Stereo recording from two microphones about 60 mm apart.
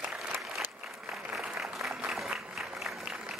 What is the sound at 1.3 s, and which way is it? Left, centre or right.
Applause, centre.